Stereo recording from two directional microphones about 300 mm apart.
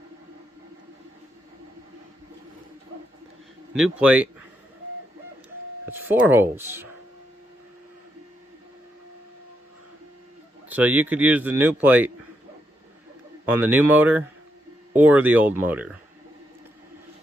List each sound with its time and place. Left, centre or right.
3.8 s a man's voice: centre
5.9 s speech: centre
10.7 s a man's voice: centre
13.4 s a man's voice: centre